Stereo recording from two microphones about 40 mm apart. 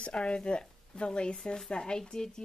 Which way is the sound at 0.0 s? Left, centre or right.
Left.